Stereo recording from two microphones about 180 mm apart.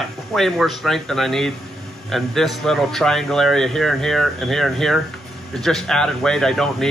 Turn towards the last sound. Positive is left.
turn(degrees=5)  # may be behind; listen again after turning